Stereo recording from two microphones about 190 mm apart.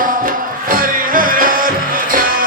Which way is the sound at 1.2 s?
45° right (ahead or behind).